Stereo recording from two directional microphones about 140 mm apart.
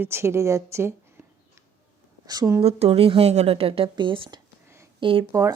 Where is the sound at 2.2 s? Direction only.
30° right (ahead or behind).